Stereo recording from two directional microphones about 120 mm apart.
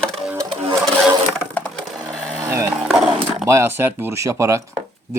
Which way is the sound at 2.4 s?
25° right (ahead or behind).